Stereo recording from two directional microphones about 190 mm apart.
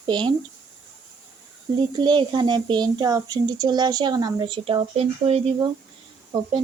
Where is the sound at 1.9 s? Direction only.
25° right (ahead or behind).